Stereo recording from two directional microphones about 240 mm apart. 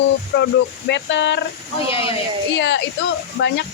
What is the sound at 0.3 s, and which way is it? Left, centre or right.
A woman's voice, left.